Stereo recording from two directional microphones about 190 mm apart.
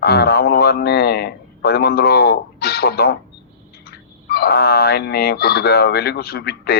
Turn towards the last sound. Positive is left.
turn(degrees=55)  # may be behind; listen again after turning